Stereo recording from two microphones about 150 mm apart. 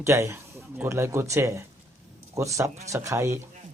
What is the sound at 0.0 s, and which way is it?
Speech, 20° right (ahead or behind).